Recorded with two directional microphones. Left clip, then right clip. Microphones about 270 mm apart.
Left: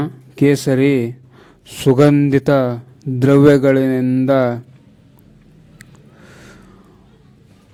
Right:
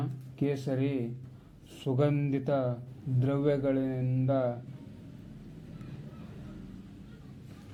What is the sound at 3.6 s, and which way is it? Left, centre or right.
Mantra, left.